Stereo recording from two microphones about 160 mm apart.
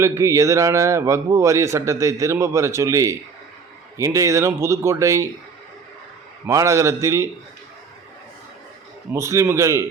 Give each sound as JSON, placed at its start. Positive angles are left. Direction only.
{"t": 0.0, "sound": "a man's voice", "side_deg": -15}
{"t": 6.4, "sound": "a man's voice", "side_deg": -20}
{"t": 9.1, "sound": "a man's voice", "side_deg": -20}